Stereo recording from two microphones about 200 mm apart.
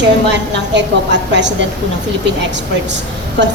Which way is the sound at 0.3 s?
60° right (ahead or behind).